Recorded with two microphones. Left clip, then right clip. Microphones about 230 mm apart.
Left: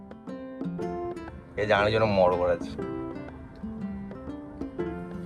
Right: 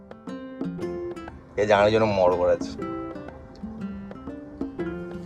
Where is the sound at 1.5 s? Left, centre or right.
Centre.